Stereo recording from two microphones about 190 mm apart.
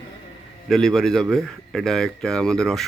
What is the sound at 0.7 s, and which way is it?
Speech, centre (ahead or behind).